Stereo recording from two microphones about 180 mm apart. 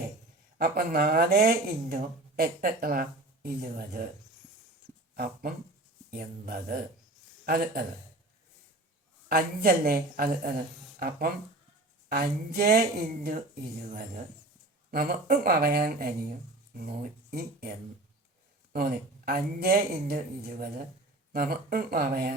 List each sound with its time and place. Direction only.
0.6 s speech: 55° right (ahead or behind)
5.1 s a man's voice: 55° right (ahead or behind)
9.3 s speech: 55° right (ahead or behind)
14.8 s speech: 55° right (ahead or behind)